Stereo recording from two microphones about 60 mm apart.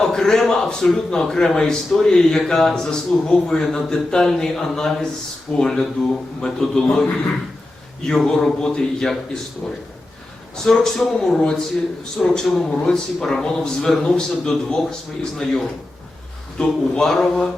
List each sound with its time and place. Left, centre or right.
0.0 s speech: centre
8.0 s a man's voice: centre
10.6 s speech: centre